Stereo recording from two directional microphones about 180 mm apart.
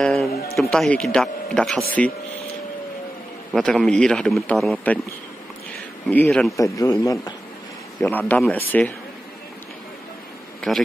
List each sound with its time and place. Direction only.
0.0 s music: centre (ahead or behind)
0.3 s speech: 60° left (ahead or behind)
0.6 s a man's voice: 5° left (ahead or behind)
3.5 s a man's voice: centre (ahead or behind)
6.0 s a man's voice: 10° left (ahead or behind)
6.5 s a man's voice: 20° left (ahead or behind)
8.0 s a man's voice: 10° left (ahead or behind)